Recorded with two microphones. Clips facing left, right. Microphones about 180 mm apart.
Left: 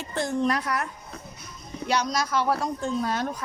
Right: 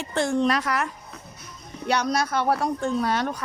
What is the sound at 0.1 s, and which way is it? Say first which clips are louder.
Speech: right 3 dB; 80° right.